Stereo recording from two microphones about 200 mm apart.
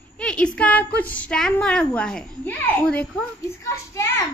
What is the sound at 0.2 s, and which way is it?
A woman's voice, 5° left (ahead or behind).